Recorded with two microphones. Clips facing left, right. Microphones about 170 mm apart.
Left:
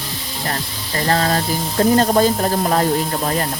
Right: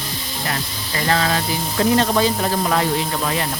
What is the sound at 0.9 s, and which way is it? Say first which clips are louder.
Speech: left 2 dB; 40° left (ahead or behind).